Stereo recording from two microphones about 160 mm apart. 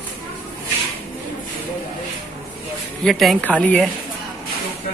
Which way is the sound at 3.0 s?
Centre (ahead or behind).